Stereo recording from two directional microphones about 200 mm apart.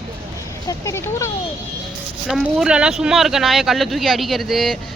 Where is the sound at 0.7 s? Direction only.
15° left (ahead or behind).